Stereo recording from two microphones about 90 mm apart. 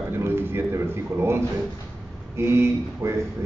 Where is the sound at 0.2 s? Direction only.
25° right (ahead or behind).